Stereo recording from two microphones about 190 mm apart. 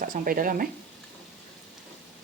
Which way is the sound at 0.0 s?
45° right (ahead or behind).